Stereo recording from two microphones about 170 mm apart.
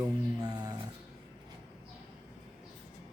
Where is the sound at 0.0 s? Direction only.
25° right (ahead or behind).